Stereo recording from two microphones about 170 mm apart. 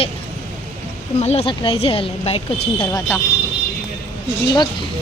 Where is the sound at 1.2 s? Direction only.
40° left (ahead or behind).